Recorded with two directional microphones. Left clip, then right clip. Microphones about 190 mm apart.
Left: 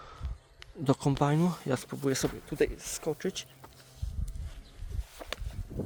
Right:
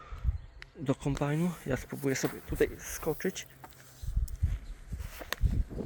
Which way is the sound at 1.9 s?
5° left (ahead or behind).